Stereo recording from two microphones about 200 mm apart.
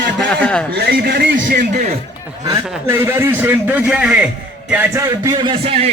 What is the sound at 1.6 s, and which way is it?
Speech, 40° right (ahead or behind).